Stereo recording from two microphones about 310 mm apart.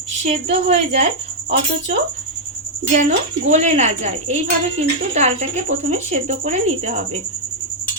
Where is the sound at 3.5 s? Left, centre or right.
Right.